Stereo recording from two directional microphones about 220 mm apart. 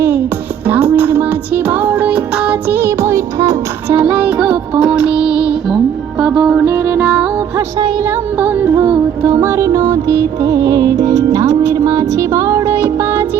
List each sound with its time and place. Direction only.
0.7 s music: 10° right (ahead or behind)
7.8 s music: 20° right (ahead or behind)
8.1 s music: 10° right (ahead or behind)